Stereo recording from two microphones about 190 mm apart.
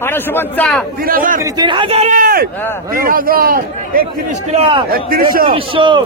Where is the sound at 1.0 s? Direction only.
45° right (ahead or behind).